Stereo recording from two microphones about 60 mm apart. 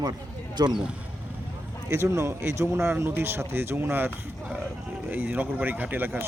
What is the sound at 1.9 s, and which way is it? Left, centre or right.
Speech, right.